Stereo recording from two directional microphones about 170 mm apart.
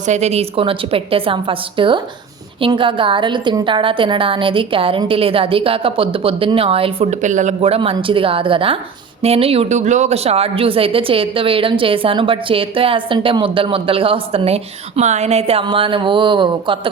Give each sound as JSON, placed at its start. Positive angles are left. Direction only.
{"t": 0.0, "sound": "speech", "side_deg": -40}